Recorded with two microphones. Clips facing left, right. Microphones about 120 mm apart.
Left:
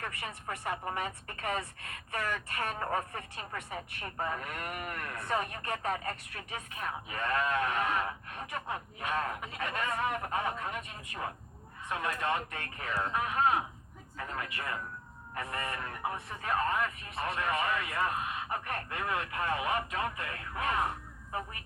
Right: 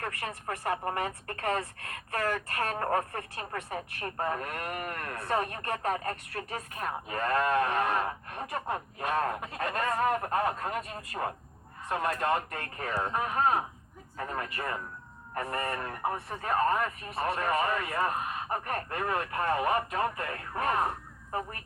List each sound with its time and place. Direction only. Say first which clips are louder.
0.0 s speech: right 4 dB; 40° right (ahead or behind)